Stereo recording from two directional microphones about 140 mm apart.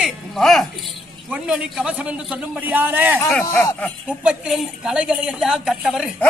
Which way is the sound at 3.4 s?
20° left (ahead or behind).